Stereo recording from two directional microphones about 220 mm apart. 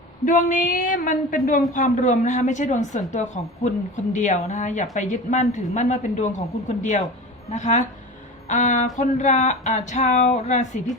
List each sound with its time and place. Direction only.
0.3 s a woman's voice: 35° left (ahead or behind)